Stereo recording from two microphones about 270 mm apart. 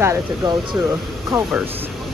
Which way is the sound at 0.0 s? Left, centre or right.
Centre.